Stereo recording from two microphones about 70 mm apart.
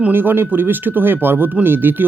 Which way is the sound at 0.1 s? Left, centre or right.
Right.